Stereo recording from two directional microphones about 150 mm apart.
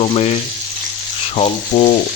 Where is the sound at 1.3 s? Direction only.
45° left (ahead or behind).